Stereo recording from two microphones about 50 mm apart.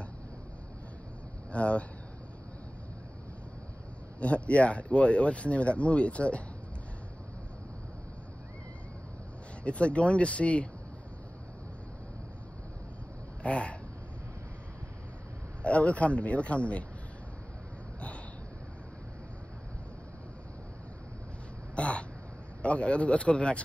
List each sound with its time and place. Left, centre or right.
1.5 s speech: left
4.2 s speech: left
9.6 s speech: left
13.4 s a sound: left
15.6 s speech: left
21.7 s a sound: left
22.6 s speech: left